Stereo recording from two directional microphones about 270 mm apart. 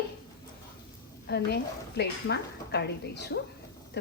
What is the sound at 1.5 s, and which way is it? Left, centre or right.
A woman's voice, left.